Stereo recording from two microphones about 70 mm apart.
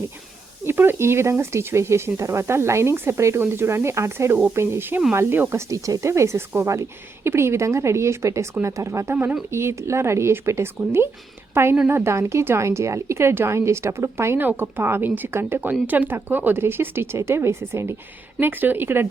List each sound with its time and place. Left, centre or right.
0.6 s a woman's voice: right